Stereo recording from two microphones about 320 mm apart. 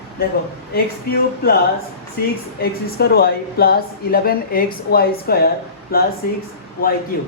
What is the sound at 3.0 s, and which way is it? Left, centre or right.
A man's voice, left.